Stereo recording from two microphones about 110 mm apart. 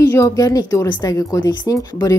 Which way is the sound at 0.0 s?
30° left (ahead or behind).